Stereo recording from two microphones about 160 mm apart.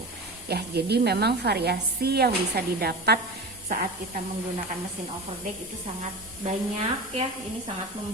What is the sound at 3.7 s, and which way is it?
Speech, 70° right (ahead or behind).